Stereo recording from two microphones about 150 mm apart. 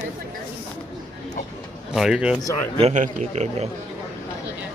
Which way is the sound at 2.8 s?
45° right (ahead or behind).